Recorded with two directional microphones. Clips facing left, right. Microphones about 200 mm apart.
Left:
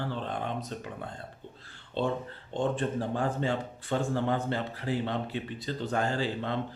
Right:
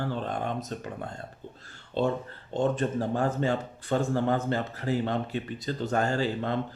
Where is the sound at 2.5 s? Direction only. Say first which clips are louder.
Right 3 dB; 40° right (ahead or behind).